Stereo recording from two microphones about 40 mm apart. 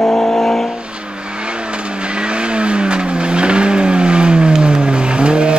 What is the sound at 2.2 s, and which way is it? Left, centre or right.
Vehicle, right.